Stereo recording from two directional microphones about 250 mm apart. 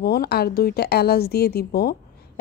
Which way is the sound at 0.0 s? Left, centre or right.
Left.